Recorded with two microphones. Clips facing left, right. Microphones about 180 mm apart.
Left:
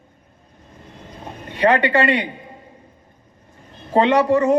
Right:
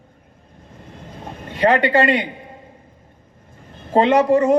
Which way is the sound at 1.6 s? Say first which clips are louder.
Right 1 dB; 40° right (ahead or behind).